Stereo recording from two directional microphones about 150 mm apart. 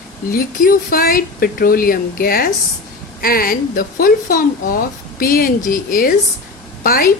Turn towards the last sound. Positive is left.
turn(degrees=75)  # may be behind; listen again after turning